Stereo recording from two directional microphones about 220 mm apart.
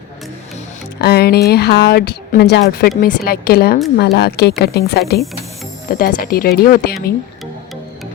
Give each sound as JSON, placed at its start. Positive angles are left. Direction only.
{"t": 1.0, "sound": "a woman's voice", "side_deg": 45}